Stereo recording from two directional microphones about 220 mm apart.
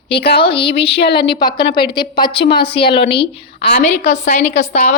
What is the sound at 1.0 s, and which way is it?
Speech, 45° left (ahead or behind).